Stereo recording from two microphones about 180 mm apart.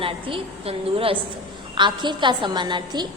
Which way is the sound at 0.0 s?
30° right (ahead or behind).